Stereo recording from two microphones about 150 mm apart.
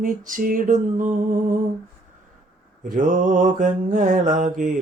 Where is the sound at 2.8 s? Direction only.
55° right (ahead or behind).